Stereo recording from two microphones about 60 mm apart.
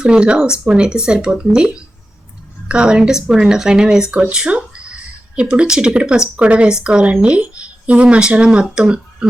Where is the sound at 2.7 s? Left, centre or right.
Centre.